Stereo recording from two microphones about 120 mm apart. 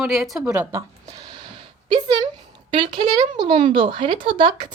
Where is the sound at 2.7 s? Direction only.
40° right (ahead or behind).